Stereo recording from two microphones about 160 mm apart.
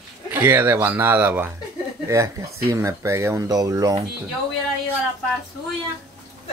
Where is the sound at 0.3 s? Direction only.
10° right (ahead or behind).